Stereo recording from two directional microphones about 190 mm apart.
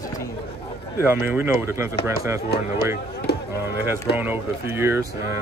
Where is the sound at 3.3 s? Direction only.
60° left (ahead or behind).